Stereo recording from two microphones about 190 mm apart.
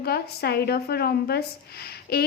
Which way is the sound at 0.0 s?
55° left (ahead or behind).